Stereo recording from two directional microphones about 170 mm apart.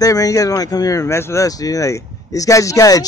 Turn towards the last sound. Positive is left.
turn(degrees=20)  # may be behind; listen again after turning